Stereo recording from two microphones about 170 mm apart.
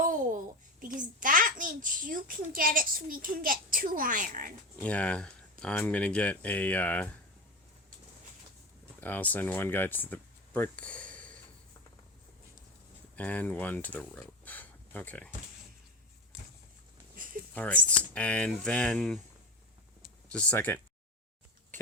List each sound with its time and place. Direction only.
0.0 s a child's voice: 50° right (ahead or behind)
4.8 s speech: 5° left (ahead or behind)
9.0 s speech: 10° left (ahead or behind)
13.1 s speech: 10° left (ahead or behind)
17.5 s speech: 10° left (ahead or behind)
20.0 s a sound: 5° left (ahead or behind)